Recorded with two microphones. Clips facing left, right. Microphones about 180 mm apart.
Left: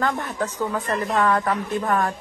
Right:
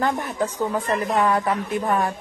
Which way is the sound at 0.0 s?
15° right (ahead or behind).